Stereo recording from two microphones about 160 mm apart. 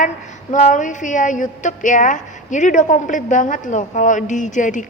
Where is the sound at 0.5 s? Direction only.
50° left (ahead or behind).